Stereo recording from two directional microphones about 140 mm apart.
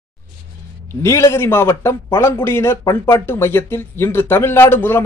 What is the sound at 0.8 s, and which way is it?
A man's voice, 20° left (ahead or behind).